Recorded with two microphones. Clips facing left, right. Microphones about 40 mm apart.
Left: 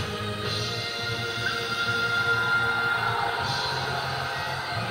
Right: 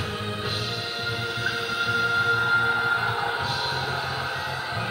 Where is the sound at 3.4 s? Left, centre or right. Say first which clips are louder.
Right 1 dB; right.